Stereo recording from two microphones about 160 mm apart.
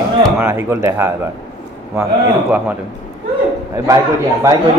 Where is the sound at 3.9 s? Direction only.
20° right (ahead or behind).